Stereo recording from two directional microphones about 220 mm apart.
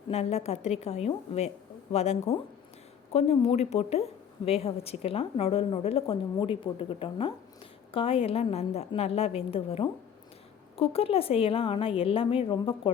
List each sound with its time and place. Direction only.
0.1 s a woman's voice: 30° left (ahead or behind)